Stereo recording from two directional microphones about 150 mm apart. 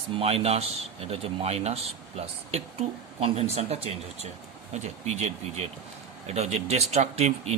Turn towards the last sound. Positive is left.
turn(degrees=-45)  # may be behind; listen again after turning